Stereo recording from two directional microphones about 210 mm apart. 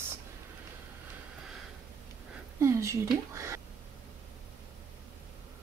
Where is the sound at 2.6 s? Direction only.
15° right (ahead or behind).